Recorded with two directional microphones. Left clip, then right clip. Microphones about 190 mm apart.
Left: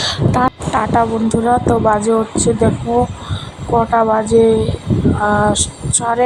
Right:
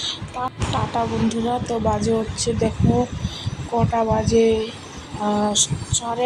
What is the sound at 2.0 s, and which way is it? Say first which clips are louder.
Speech: left 7 dB; 45° left (ahead or behind).